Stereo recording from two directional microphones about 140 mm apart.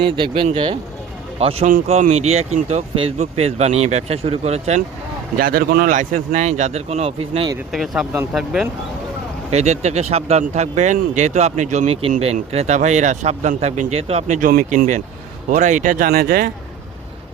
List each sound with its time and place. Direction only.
0.0 s speech: 40° right (ahead or behind)
1.9 s speech: 55° right (ahead or behind)
5.4 s speech: 90° right; by 7.5 s 45° right (ahead or behind)
7.7 s speech: centre (ahead or behind)
9.5 s speech: 55° right (ahead or behind); by 16.5 s 90° right